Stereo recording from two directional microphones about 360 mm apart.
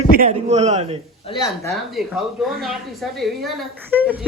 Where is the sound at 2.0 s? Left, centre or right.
Centre.